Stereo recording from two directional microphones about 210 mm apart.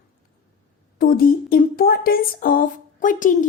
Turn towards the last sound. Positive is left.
turn(degrees=40)  # may be behind; listen again after turning